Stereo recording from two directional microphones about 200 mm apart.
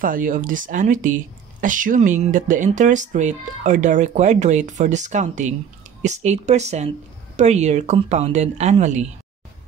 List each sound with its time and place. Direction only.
0.0 s speech: 45° right (ahead or behind)